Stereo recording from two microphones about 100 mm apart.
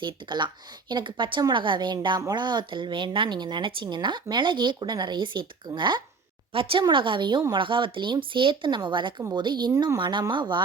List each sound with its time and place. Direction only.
0.0 s speech: 50° right (ahead or behind)
6.5 s a woman's voice: 65° right (ahead or behind)